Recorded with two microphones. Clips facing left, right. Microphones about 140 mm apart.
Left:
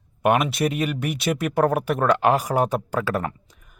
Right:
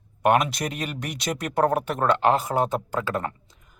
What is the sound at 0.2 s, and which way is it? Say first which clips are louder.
Speech: left 1 dB; 5° left (ahead or behind).